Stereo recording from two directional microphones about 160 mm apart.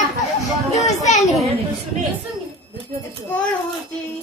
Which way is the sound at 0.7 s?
45° left (ahead or behind).